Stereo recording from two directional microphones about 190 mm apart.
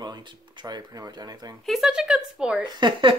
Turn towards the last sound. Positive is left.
turn(degrees=-25)  # may be behind; listen again after turning